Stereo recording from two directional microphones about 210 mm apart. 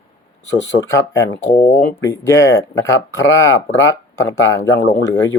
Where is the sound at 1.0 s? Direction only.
15° left (ahead or behind).